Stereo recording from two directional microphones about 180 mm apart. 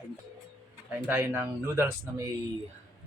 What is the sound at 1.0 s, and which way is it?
Speech, 10° right (ahead or behind).